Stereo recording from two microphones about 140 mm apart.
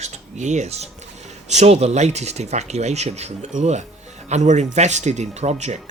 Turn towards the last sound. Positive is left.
turn(degrees=-55)  # may be behind; listen again after turning